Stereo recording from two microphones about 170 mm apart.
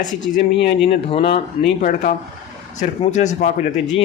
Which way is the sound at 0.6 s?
80° left.